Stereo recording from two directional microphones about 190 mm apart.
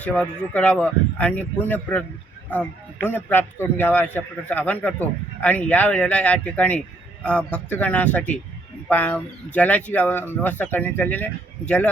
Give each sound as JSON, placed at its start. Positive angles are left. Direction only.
{"t": 0.0, "sound": "a man's voice", "side_deg": 10}